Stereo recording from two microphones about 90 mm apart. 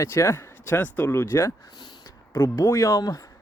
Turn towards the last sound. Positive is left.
turn(degrees=40)  # may be behind; listen again after turning